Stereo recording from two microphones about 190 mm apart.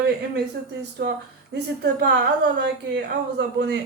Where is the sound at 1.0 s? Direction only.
60° right (ahead or behind).